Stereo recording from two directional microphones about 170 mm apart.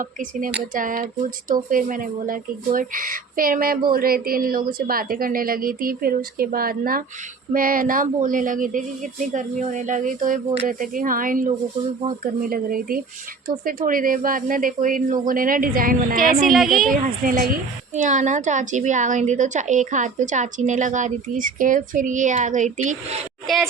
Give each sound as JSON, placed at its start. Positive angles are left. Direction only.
{"t": 0.0, "sound": "a woman's voice", "side_deg": -50}
{"t": 16.4, "sound": "speech", "side_deg": 0}
{"t": 16.9, "sound": "a woman's voice", "side_deg": -55}
{"t": 23.5, "sound": "speech", "side_deg": 0}